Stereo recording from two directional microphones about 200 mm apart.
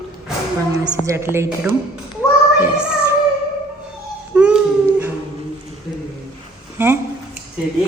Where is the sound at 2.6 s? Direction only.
5° right (ahead or behind).